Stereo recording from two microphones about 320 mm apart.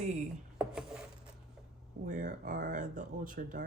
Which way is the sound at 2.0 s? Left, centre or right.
Right.